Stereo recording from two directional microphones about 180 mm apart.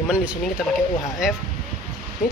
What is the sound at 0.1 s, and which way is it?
Speech, 5° right (ahead or behind).